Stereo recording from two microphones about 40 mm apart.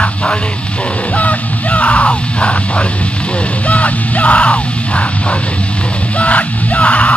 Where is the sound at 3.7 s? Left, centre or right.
Left.